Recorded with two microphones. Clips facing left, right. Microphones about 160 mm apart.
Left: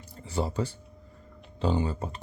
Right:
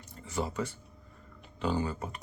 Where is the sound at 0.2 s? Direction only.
30° left (ahead or behind).